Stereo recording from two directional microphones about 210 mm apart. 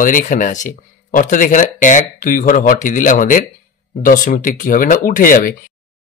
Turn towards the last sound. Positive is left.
turn(degrees=40)  # may be behind; listen again after turning